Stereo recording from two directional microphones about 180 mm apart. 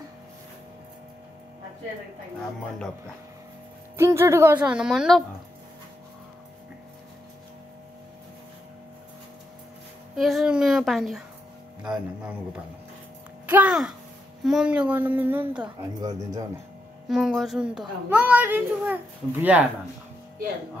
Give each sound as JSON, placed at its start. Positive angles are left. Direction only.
{"t": 3.9, "sound": "a woman's voice", "side_deg": -15}
{"t": 10.1, "sound": "a child's voice", "side_deg": 0}
{"t": 13.5, "sound": "a child's voice", "side_deg": -5}
{"t": 16.0, "sound": "speech", "side_deg": -20}
{"t": 17.1, "sound": "a child's voice", "side_deg": 0}